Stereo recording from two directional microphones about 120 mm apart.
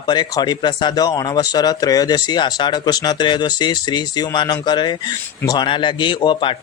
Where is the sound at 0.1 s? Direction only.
35° left (ahead or behind).